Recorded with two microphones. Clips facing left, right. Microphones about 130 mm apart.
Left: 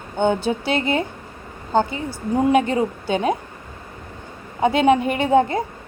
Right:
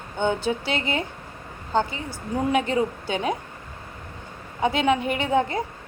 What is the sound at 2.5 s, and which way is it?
Speech, 45° left (ahead or behind).